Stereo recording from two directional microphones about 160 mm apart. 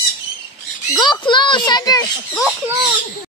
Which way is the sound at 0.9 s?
25° left (ahead or behind).